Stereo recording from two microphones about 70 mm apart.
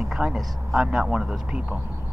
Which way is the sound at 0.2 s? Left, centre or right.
Centre.